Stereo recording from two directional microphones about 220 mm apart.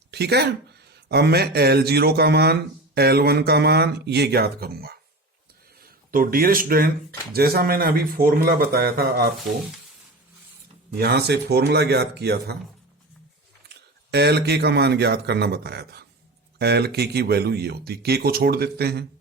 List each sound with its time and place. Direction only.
0.1 s speech: 50° right (ahead or behind)
10.9 s speech: 45° right (ahead or behind)
13.7 s speech: 50° right (ahead or behind)